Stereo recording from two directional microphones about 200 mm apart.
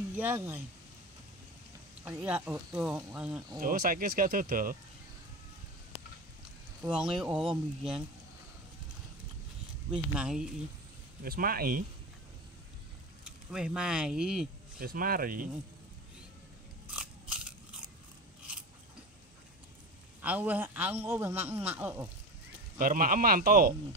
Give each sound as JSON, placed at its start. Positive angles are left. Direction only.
{"t": 0.2, "sound": "a man's voice", "side_deg": -10}
{"t": 2.0, "sound": "a man's voice", "side_deg": -5}
{"t": 3.6, "sound": "speech", "side_deg": -45}
{"t": 6.9, "sound": "speech", "side_deg": -5}
{"t": 9.8, "sound": "speech", "side_deg": -5}
{"t": 11.2, "sound": "speech", "side_deg": -50}
{"t": 13.2, "sound": "speech", "side_deg": -5}
{"t": 14.8, "sound": "speech", "side_deg": -45}
{"t": 16.8, "sound": "biting", "side_deg": -5}
{"t": 20.2, "sound": "a man's voice", "side_deg": -10}
{"t": 22.8, "sound": "speech", "side_deg": -45}